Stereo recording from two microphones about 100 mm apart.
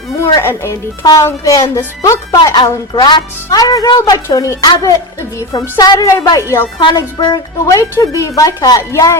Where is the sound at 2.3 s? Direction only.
45° left (ahead or behind).